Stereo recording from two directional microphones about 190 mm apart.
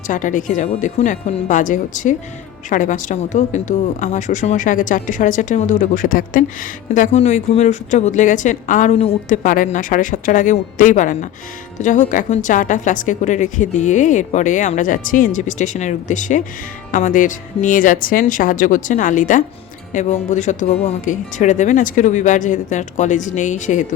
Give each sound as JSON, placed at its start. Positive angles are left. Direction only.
{"t": 0.1, "sound": "a woman's voice", "side_deg": 45}
{"t": 9.4, "sound": "a woman's voice", "side_deg": 45}